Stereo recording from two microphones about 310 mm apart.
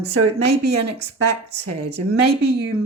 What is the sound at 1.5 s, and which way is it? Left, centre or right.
Speech, right.